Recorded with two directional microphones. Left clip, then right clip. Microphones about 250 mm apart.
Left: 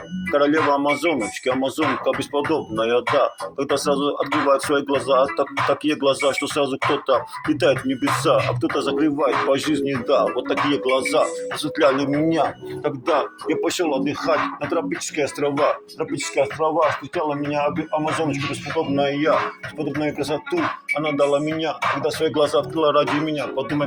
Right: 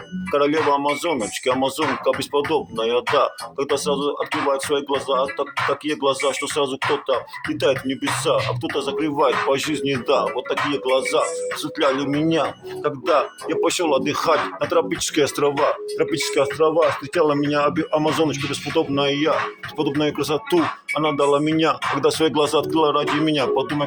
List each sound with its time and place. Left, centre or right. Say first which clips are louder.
0.3 s speech: even; centre
9.0 s speech: right 2 dB; right
10.3 s speech: left 1 dB; centre
13.9 s speech: right 2 dB; right
21.4 s speech: right 3 dB; right
22.4 s speech: right 1 dB; centre
23.2 s speech: right 5 dB; right